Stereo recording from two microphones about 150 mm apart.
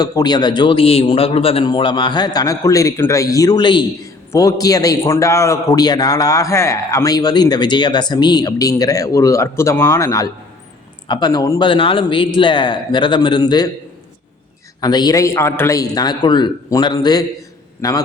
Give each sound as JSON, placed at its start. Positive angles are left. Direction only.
{"t": 0.0, "sound": "a man's voice", "side_deg": 25}
{"t": 11.6, "sound": "speech", "side_deg": 35}
{"t": 14.8, "sound": "a man's voice", "side_deg": 25}